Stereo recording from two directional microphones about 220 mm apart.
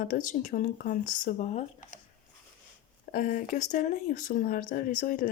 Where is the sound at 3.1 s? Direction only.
40° left (ahead or behind).